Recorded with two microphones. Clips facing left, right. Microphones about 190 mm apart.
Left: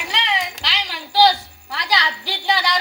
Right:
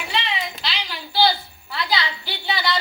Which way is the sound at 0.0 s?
80° left.